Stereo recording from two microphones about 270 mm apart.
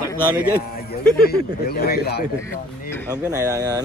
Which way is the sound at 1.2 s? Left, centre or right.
Left.